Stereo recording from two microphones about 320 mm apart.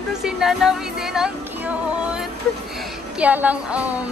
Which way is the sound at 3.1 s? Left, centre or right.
Centre.